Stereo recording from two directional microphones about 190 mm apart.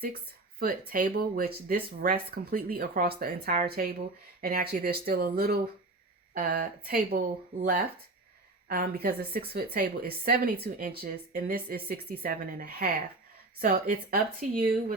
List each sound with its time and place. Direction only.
0.6 s a woman's voice: 50° right (ahead or behind)
8.6 s a woman's voice: 50° right (ahead or behind)